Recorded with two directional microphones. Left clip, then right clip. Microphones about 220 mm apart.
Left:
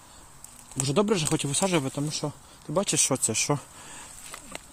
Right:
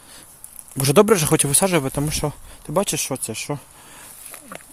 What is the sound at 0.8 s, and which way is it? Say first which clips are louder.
Speech: right 10 dB; 35° right (ahead or behind).